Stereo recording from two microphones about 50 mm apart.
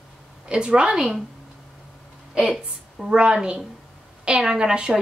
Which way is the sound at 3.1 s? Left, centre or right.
Right.